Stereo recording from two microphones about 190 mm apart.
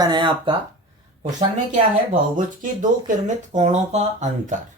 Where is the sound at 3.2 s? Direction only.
40° right (ahead or behind).